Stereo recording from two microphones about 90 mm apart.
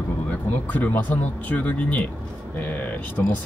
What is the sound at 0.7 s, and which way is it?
Speech, 15° left (ahead or behind).